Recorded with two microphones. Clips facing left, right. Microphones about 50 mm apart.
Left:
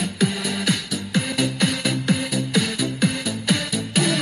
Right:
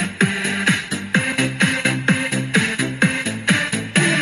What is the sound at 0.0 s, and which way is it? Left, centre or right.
Music, right.